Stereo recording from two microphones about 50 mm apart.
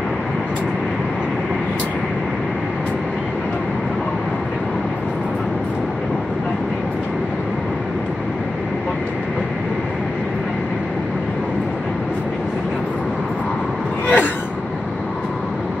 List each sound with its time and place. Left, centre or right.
14.0 s gasp: left